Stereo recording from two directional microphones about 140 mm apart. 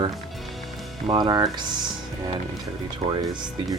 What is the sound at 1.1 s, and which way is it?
Speech, 30° right (ahead or behind).